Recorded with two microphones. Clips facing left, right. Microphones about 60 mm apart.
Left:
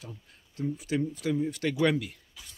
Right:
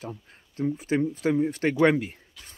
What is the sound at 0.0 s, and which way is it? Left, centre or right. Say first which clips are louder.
Speech: right 8 dB; right.